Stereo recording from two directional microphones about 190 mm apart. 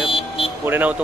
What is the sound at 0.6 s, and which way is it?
Speech, 10° right (ahead or behind).